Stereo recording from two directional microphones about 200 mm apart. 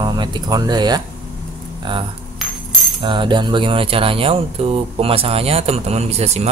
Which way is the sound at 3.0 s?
25° right (ahead or behind).